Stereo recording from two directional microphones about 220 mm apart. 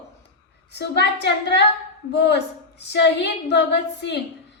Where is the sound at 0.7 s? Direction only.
50° left (ahead or behind).